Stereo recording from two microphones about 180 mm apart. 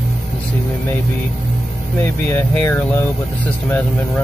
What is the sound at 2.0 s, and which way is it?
Speech, 10° left (ahead or behind).